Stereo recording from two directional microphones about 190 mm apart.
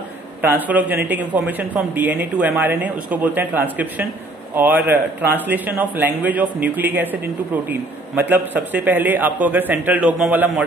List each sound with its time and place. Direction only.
0.4 s speech: 10° right (ahead or behind)
8.2 s speech: 10° right (ahead or behind)